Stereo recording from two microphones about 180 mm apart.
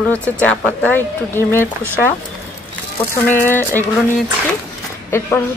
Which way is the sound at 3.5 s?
10° left (ahead or behind).